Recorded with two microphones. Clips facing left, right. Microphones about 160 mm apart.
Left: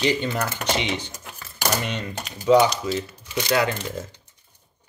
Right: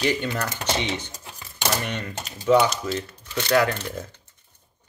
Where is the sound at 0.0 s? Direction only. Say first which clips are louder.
Left 2 dB; 15° left (ahead or behind).